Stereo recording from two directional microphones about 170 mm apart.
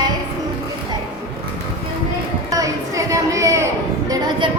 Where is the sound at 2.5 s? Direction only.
20° right (ahead or behind).